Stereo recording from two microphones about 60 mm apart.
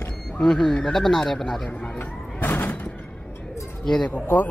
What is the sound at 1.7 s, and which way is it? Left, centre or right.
Speech, centre.